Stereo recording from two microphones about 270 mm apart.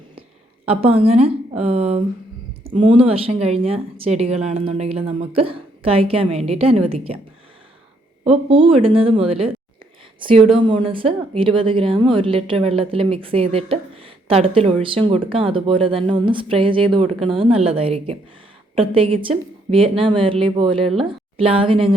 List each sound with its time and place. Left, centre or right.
0.2 s a woman's voice: right
8.2 s a woman's voice: right